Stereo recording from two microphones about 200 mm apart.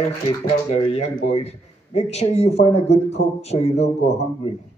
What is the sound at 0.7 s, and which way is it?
A man's voice, 30° left (ahead or behind).